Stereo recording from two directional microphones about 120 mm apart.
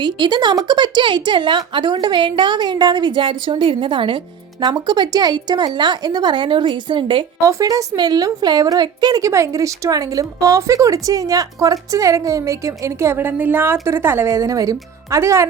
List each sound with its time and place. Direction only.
0.0 s a woman's voice: 40° right (ahead or behind)
7.4 s a woman's voice: 30° right (ahead or behind)